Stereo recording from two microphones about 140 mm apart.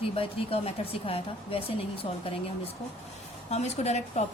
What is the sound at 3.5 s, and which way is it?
Speech, 50° left (ahead or behind).